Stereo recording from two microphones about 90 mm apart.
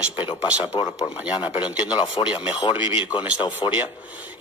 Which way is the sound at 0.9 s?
10° right (ahead or behind).